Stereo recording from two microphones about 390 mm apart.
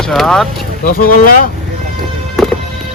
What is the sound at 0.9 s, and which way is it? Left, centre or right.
Speech, left.